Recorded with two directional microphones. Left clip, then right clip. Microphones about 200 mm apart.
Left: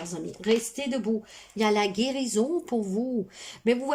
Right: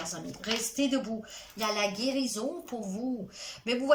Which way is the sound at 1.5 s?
50° left (ahead or behind).